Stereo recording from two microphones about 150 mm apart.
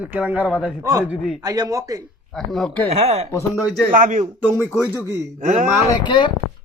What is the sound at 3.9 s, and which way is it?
Speech, 60° right (ahead or behind).